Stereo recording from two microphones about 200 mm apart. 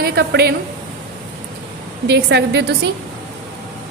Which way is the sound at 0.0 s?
50° right (ahead or behind).